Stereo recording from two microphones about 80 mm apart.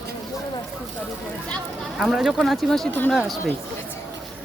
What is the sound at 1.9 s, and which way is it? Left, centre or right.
Speech, centre.